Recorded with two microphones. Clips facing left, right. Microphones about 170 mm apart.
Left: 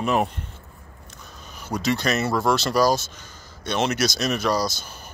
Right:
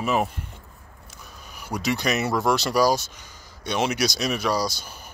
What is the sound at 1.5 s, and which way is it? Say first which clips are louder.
Speech: left 2 dB; 15° right (ahead or behind).